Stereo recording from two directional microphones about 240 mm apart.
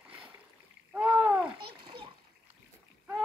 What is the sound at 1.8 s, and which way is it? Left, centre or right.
Splash, centre.